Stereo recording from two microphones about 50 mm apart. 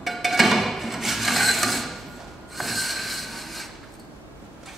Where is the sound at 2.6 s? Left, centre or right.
Centre.